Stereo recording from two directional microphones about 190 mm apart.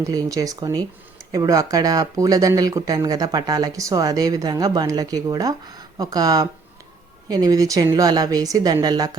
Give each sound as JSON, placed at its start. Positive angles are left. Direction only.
{"t": 0.0, "sound": "speech", "side_deg": -20}